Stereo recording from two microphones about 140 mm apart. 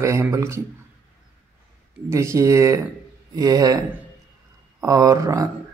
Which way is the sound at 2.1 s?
20° right (ahead or behind).